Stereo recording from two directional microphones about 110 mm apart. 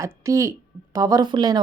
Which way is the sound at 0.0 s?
30° right (ahead or behind).